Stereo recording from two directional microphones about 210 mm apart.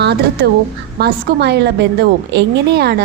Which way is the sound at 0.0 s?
50° right (ahead or behind).